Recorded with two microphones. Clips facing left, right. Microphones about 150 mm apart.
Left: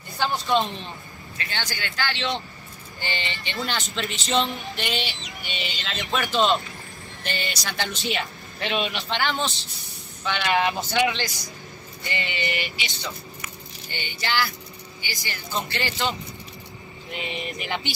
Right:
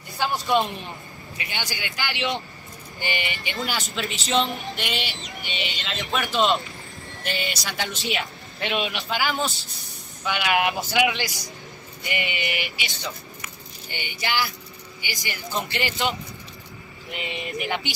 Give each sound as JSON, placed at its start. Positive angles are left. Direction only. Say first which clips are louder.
{"t": 0.5, "sound": "speech", "louder": "right 2 dB", "side_deg": -15}
{"t": 13.8, "sound": "speech", "louder": "even", "side_deg": -15}